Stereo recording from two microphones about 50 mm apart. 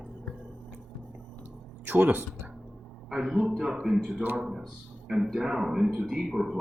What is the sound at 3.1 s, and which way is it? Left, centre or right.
A man's voice, centre.